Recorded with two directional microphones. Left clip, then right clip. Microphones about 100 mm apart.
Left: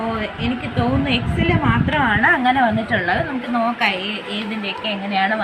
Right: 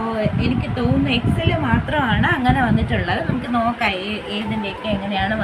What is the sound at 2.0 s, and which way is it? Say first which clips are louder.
Speech: left 5 dB; 50° left (ahead or behind).